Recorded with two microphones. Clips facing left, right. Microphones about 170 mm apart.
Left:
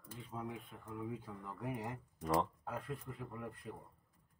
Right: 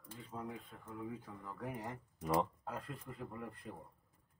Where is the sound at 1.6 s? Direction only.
10° left (ahead or behind).